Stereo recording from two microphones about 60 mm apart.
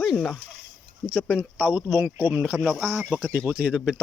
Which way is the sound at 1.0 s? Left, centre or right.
Centre.